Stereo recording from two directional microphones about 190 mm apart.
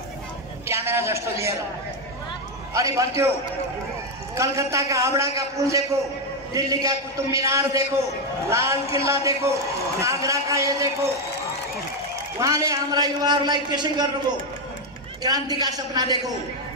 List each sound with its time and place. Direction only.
0.7 s a man's voice: 15° right (ahead or behind)
2.7 s a man's voice: 15° right (ahead or behind)
4.4 s a man's voice: 15° right (ahead or behind)
12.4 s a man's voice: 15° right (ahead or behind)
15.2 s a man's voice: 20° right (ahead or behind)